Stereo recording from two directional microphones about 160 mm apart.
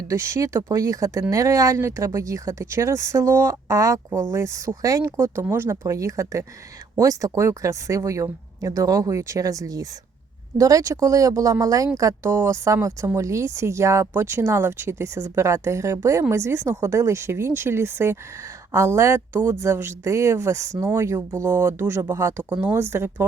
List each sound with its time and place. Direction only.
0.1 s speech: 20° right (ahead or behind)